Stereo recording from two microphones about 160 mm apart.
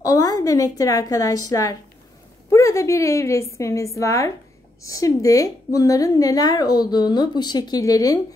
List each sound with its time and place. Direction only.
0.0 s a woman's voice: 25° left (ahead or behind)